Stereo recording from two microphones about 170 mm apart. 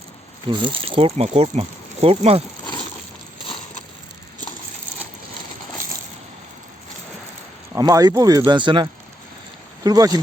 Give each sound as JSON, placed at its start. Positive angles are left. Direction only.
{"t": 0.4, "sound": "speech", "side_deg": -30}
{"t": 3.4, "sound": "a sound", "side_deg": 35}
{"t": 7.7, "sound": "speech", "side_deg": -20}